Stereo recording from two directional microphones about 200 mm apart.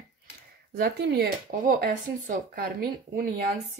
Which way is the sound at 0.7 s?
50° right (ahead or behind).